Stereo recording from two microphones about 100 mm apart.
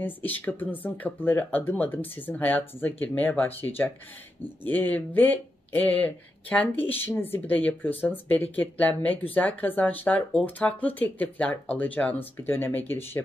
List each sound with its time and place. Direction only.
0.0 s speech: 20° left (ahead or behind)